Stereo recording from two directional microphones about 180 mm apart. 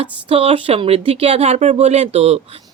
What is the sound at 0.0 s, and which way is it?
Speech, 35° right (ahead or behind).